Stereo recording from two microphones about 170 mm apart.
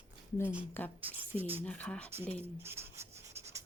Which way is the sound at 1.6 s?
10° left (ahead or behind).